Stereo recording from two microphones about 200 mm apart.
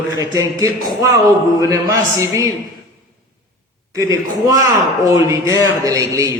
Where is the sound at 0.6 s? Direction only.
15° right (ahead or behind).